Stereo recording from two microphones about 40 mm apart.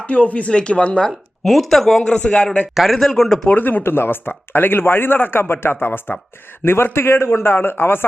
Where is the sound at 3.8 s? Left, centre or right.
Left.